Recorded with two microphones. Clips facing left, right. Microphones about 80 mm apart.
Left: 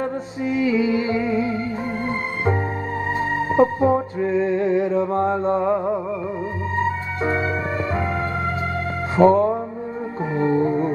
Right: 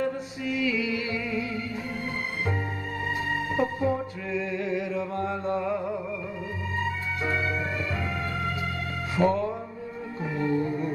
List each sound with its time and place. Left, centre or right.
0.0 s music: left
3.2 s music: left
6.8 s organ: left
9.1 s music: left